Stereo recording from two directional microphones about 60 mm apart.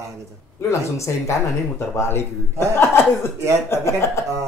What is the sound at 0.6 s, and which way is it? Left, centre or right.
Speech, left.